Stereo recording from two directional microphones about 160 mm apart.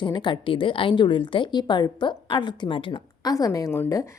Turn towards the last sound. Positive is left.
turn(degrees=20)  # may be behind; listen again after turning